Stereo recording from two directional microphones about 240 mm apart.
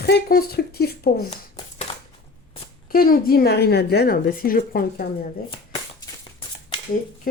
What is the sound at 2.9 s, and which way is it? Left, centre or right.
A woman's voice, left.